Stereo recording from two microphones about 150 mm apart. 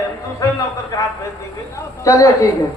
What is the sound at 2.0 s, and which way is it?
Speech, 20° left (ahead or behind).